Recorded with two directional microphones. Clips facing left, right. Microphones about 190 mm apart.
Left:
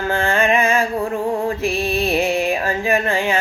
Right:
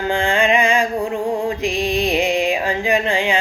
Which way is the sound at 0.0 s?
15° right (ahead or behind).